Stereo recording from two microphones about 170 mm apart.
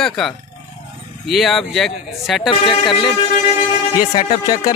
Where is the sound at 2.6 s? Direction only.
30° left (ahead or behind).